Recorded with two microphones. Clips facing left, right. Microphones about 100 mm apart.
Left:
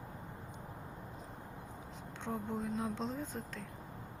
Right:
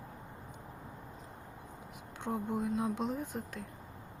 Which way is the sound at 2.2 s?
15° right (ahead or behind).